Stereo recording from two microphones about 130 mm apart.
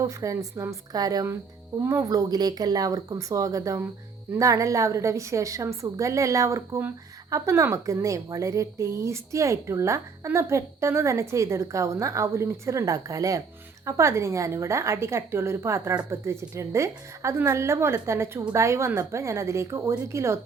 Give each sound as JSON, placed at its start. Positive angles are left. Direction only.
{"t": 0.0, "sound": "a woman's voice", "side_deg": -25}